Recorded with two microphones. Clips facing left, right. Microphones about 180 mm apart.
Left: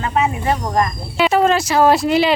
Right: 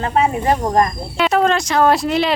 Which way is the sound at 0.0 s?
40° right (ahead or behind).